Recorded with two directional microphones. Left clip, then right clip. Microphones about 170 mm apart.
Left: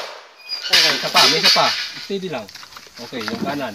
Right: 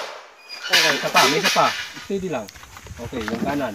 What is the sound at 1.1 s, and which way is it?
Speech, centre (ahead or behind).